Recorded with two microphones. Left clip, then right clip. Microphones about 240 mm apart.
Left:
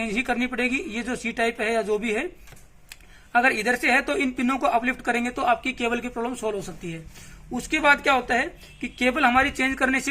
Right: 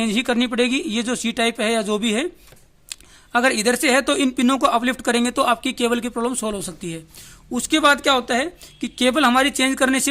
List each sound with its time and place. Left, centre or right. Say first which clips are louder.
0.0 s speech: right 4 dB; right